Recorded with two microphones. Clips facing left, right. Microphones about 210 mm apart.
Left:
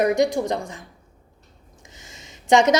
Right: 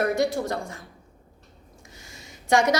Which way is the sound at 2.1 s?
20° left (ahead or behind).